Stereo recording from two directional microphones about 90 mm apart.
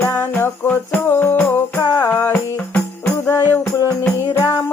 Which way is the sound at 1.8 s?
45° left (ahead or behind).